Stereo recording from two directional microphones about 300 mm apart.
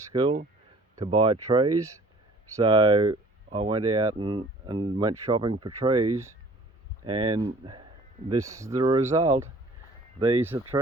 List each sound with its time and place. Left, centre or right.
0.1 s speech: centre